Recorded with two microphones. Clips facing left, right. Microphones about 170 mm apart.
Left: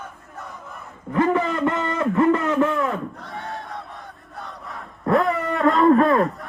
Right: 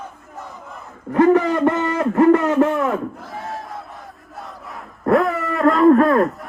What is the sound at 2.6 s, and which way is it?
Speech, 50° right (ahead or behind).